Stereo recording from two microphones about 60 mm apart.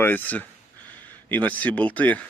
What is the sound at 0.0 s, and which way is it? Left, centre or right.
Speech, left.